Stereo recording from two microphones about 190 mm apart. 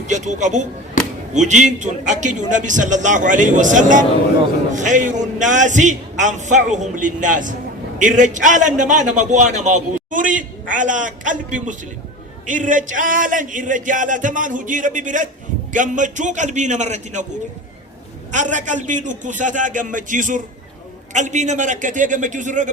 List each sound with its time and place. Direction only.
0.1 s a man's voice: 40° right (ahead or behind)
18.3 s a man's voice: 40° right (ahead or behind)